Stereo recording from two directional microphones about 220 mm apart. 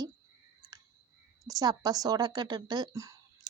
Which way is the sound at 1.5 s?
15° right (ahead or behind).